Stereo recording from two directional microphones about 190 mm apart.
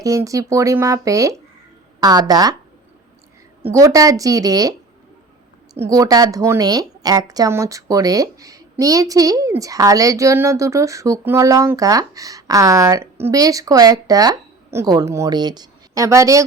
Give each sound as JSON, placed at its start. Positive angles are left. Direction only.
{"t": 0.0, "sound": "a woman's voice", "side_deg": -15}
{"t": 3.7, "sound": "a woman's voice", "side_deg": -15}
{"t": 5.7, "sound": "a woman's voice", "side_deg": -15}